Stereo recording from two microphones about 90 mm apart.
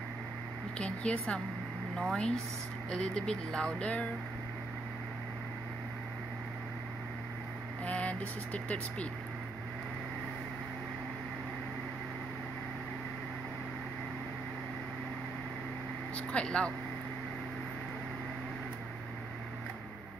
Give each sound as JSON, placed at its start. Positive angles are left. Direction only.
{"t": 0.7, "sound": "speech", "side_deg": 15}
{"t": 7.8, "sound": "vehicle", "side_deg": 15}
{"t": 8.6, "sound": "speech", "side_deg": 15}
{"t": 16.2, "sound": "speech", "side_deg": 10}